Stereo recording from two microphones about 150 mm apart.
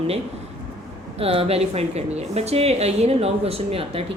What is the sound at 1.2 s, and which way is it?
A woman's voice, 40° right (ahead or behind).